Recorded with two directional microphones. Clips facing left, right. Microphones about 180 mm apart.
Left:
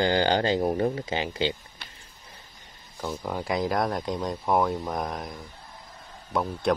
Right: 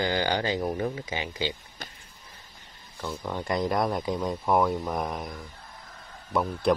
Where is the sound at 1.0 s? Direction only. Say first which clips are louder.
Left 4 dB; 30° left (ahead or behind).